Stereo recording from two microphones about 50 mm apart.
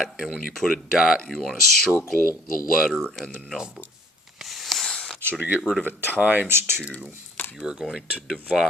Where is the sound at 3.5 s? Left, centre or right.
Centre.